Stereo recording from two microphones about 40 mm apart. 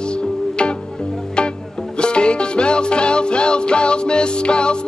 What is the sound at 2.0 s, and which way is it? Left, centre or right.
Music, left.